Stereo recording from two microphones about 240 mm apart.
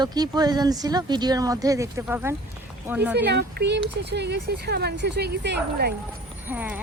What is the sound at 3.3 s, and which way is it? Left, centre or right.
Speech, right.